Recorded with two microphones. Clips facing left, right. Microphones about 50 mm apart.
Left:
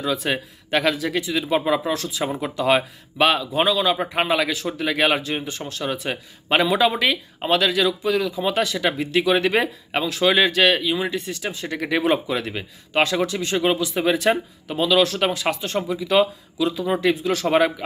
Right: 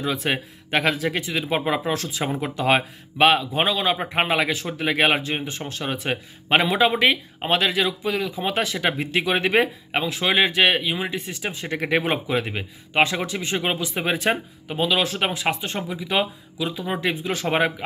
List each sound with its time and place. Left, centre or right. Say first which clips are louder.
0.0 s speech: left 1 dB; right